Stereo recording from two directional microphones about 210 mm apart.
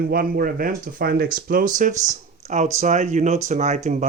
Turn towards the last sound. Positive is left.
turn(degrees=-35)  # may be behind; listen again after turning